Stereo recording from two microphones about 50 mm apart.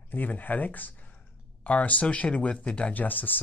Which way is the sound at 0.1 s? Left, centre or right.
Left.